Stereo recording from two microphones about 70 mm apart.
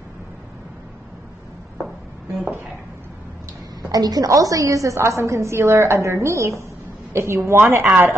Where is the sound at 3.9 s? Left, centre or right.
Right.